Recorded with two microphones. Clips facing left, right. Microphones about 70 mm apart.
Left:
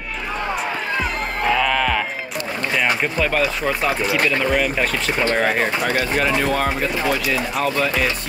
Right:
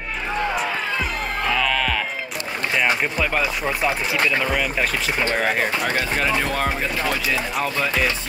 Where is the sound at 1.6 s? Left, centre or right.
Centre.